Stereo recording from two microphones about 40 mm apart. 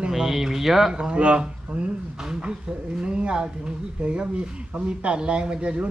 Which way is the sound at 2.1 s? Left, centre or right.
Centre.